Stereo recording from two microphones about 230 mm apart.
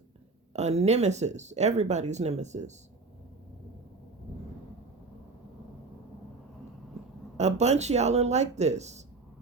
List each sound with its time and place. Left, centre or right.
0.5 s speech: right
7.3 s speech: right